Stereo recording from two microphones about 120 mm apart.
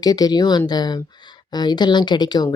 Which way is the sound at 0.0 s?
35° left (ahead or behind).